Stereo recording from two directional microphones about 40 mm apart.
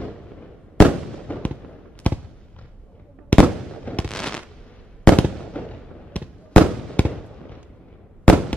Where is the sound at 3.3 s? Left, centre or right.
Left.